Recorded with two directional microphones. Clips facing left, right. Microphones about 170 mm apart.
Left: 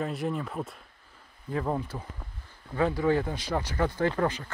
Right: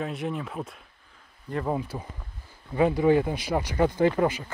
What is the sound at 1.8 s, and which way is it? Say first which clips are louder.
Speech: right 2 dB; 10° right (ahead or behind).